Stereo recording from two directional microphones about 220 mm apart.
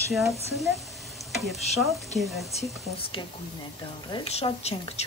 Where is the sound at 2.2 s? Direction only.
Centre (ahead or behind).